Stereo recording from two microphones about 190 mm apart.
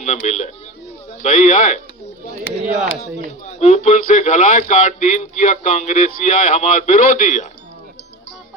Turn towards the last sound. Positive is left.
turn(degrees=40)  # may be behind; listen again after turning